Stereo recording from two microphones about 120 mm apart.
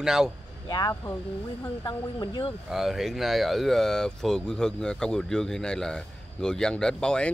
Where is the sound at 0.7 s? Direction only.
35° left (ahead or behind).